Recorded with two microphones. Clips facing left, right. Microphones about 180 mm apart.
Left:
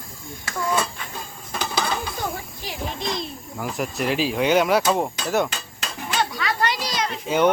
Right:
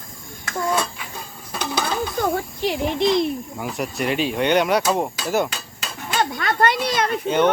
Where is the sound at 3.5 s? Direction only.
Centre (ahead or behind).